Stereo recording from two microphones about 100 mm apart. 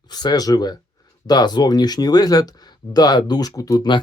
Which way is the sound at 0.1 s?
45° left (ahead or behind).